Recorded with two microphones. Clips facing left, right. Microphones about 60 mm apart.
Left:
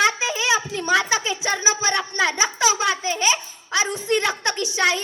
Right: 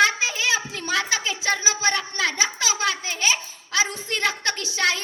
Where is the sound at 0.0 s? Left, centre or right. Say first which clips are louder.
Even; left.